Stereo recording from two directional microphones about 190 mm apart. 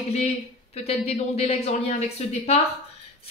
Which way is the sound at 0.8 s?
30° left (ahead or behind).